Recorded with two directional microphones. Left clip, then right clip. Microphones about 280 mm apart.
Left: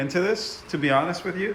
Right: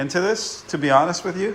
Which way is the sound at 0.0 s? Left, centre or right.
Centre.